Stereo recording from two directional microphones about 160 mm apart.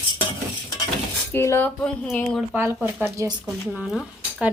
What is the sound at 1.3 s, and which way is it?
Speech, 15° left (ahead or behind).